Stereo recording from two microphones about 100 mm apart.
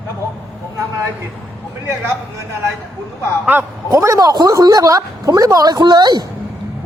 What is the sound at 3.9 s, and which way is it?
A woman's voice, 35° right (ahead or behind).